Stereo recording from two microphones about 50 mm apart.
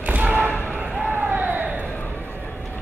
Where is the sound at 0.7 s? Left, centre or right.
Right.